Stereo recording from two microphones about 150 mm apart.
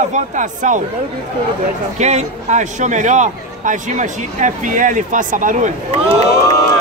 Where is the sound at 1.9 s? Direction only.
50° right (ahead or behind).